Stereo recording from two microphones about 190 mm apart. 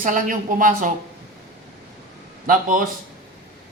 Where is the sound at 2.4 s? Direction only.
45° right (ahead or behind).